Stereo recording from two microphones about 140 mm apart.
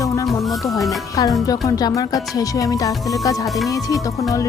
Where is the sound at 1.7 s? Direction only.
25° left (ahead or behind).